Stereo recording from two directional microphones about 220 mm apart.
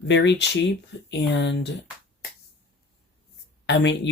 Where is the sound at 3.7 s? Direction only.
50° left (ahead or behind).